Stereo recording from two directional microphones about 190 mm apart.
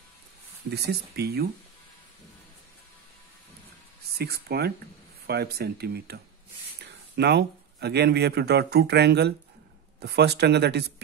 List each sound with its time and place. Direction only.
0.7 s speech: 60° right (ahead or behind)
4.2 s speech: 55° right (ahead or behind)